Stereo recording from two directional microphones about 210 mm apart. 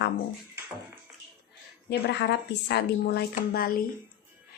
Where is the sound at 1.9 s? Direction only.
55° left (ahead or behind).